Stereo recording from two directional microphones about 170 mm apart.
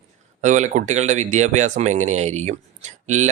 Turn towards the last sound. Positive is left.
turn(degrees=-45)  # may be behind; listen again after turning